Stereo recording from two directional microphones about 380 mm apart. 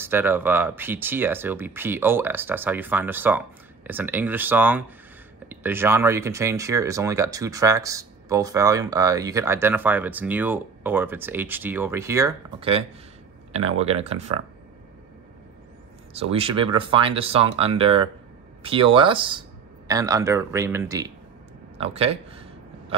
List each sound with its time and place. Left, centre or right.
0.0 s speech: centre
16.1 s speech: centre
21.7 s a sound: centre